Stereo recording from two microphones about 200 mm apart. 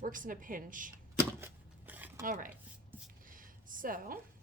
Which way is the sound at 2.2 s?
40° right (ahead or behind).